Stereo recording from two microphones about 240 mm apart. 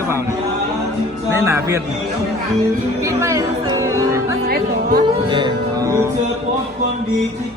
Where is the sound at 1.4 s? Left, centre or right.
Centre.